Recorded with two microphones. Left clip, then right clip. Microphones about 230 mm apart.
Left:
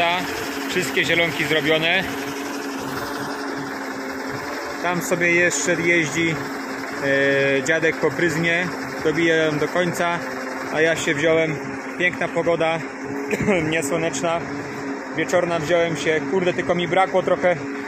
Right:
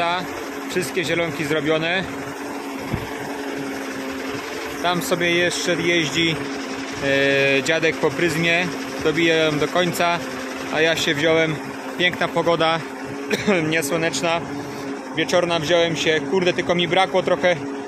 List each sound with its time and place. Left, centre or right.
0.7 s speech: centre
4.8 s speech: centre